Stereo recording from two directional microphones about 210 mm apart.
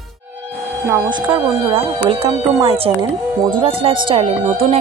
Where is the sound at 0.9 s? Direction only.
20° right (ahead or behind).